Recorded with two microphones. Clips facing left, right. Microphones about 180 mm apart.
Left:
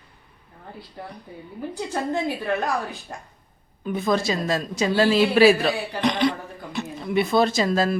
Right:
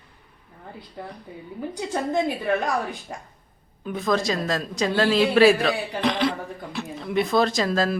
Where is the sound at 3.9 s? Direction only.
Centre (ahead or behind).